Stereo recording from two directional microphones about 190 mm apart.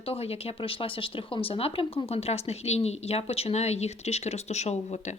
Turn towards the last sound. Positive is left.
turn(degrees=35)  # may be behind; listen again after turning